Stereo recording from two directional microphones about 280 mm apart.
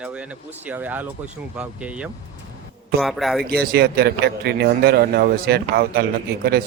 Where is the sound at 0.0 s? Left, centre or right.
Centre.